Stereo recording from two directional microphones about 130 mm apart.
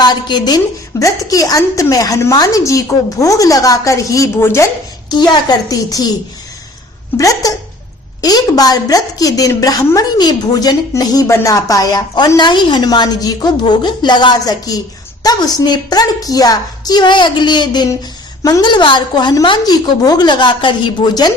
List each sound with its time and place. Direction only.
0.0 s a woman's voice: 30° left (ahead or behind)
5.0 s a woman's voice: 30° left (ahead or behind)
7.2 s a woman's voice: 25° left (ahead or behind)